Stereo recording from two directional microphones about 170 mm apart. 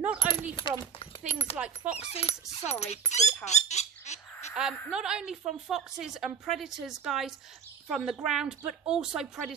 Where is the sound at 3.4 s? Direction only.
40° left (ahead or behind).